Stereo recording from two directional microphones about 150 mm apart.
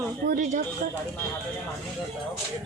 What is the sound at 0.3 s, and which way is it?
Speech, 60° right (ahead or behind).